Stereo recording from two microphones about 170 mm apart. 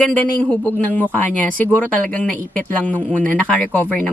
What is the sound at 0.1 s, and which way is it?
Speech, 10° left (ahead or behind).